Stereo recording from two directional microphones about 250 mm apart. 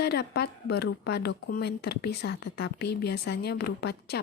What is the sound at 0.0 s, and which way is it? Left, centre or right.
A woman's voice, left.